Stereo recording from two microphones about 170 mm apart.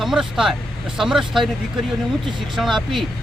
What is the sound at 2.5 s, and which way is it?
Speech, centre (ahead or behind).